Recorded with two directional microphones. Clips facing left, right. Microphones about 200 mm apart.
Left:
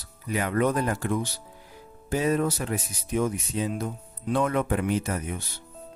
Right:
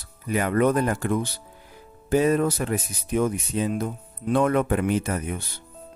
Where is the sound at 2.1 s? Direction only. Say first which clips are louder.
Right 4 dB; 55° right (ahead or behind).